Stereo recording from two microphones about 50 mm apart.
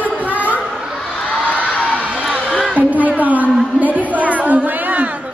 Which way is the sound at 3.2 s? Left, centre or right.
Right.